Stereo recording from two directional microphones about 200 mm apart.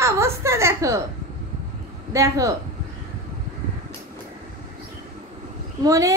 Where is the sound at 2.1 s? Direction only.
15° right (ahead or behind).